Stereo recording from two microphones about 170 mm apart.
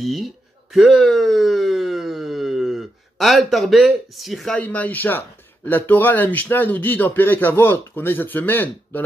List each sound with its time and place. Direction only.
0.0 s speech: centre (ahead or behind)
0.7 s a sound: centre (ahead or behind)
5.7 s speech: 10° left (ahead or behind)